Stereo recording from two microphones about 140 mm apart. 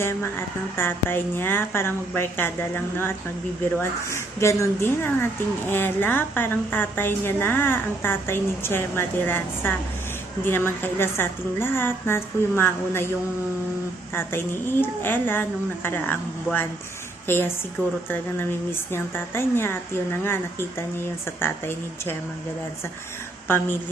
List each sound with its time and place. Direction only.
0.8 s a woman's voice: 15° left (ahead or behind)
14.1 s a woman's voice: 15° left (ahead or behind)